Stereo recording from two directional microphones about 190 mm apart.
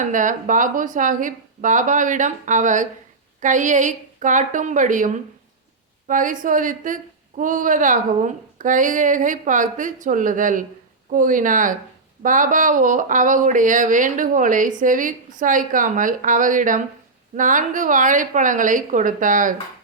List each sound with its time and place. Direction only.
0.0 s a woman's voice: 45° right (ahead or behind)